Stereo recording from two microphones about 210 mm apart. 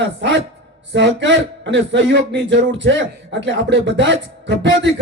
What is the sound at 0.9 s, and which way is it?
Speech, 60° right (ahead or behind).